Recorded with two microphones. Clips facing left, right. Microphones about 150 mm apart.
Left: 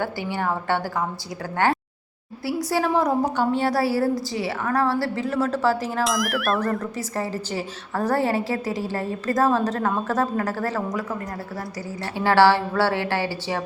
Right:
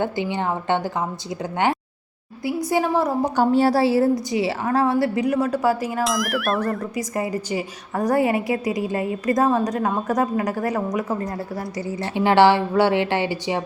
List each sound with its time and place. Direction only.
0.0 s a woman's voice: 20° right (ahead or behind)
2.6 s speech: 15° right (ahead or behind)
3.3 s a woman's voice: 40° right (ahead or behind); by 6.0 s 10° right (ahead or behind)
6.0 s speech: centre (ahead or behind); by 10.8 s 20° right (ahead or behind)
11.9 s a woman's voice: 20° right (ahead or behind)